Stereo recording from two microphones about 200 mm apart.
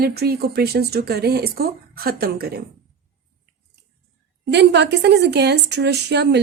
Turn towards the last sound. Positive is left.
turn(degrees=-55)  # may be behind; listen again after turning